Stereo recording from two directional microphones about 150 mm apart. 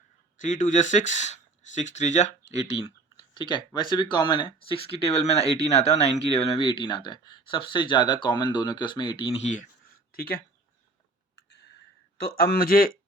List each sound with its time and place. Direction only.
0.3 s speech: 55° left (ahead or behind)
3.3 s speech: 30° left (ahead or behind)
9.4 s speech: 55° left (ahead or behind)
10.1 s speech: 90° left
12.1 s speech: 90° left